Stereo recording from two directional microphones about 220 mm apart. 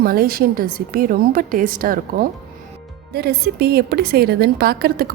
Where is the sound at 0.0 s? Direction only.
40° right (ahead or behind).